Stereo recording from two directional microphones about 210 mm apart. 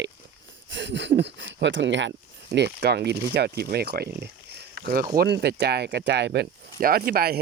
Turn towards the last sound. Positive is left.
turn(degrees=-45)  # may be behind; listen again after turning